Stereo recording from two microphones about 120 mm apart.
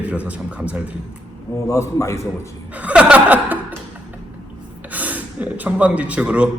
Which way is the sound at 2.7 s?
10° right (ahead or behind).